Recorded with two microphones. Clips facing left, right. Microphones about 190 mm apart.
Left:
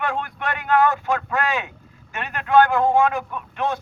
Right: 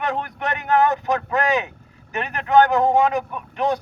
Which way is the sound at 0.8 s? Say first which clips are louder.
Right 1 dB; 20° right (ahead or behind).